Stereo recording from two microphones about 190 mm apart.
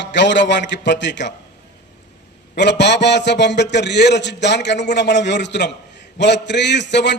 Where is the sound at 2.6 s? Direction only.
65° left (ahead or behind).